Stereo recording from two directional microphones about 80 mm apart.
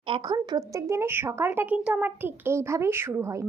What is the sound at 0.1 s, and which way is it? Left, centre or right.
A child's voice, right.